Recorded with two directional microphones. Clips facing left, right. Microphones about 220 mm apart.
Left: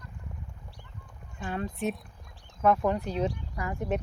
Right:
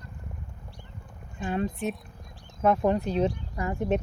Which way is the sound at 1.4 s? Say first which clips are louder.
Right 3 dB; 20° right (ahead or behind).